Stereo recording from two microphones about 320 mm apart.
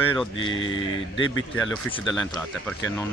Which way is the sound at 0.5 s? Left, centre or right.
Left.